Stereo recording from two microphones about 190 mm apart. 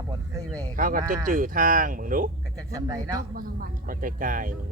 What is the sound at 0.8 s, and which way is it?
Speech, 45° right (ahead or behind).